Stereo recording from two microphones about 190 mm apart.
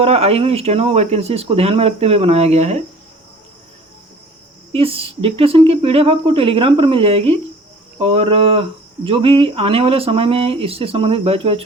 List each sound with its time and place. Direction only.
0.0 s speech: 35° right (ahead or behind)
4.7 s speech: 30° right (ahead or behind)